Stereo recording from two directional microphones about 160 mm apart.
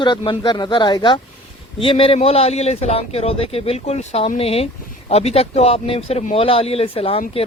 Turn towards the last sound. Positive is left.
turn(degrees=40)  # may be behind; listen again after turning